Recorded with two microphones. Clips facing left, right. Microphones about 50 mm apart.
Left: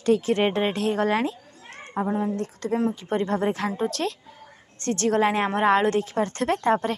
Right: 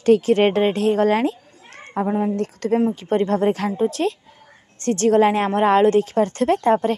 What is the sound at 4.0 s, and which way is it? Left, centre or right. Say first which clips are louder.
Speech: right 7 dB; centre.